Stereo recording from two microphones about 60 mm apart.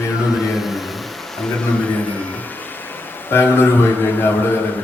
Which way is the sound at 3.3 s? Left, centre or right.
Left.